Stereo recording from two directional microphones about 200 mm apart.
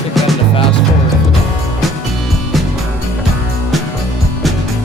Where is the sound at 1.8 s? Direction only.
Centre (ahead or behind).